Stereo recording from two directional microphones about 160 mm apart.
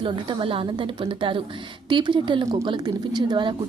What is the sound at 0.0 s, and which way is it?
Speech, 35° right (ahead or behind).